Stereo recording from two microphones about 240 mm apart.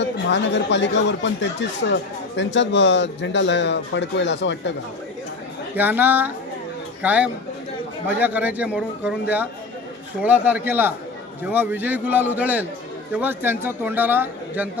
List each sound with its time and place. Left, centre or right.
0.0 s speech: left
5.7 s a man's voice: centre